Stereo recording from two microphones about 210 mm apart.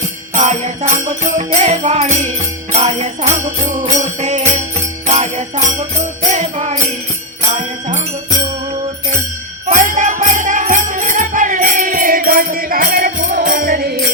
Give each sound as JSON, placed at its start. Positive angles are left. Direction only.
{"t": 0.3, "sound": "music", "side_deg": -30}
{"t": 7.5, "sound": "jingle bell", "side_deg": -35}
{"t": 9.6, "sound": "music", "side_deg": -35}